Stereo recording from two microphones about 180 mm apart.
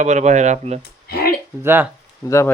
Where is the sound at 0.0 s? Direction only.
40° right (ahead or behind).